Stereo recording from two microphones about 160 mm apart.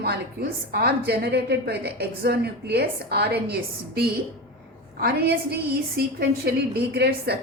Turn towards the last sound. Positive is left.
turn(degrees=-85)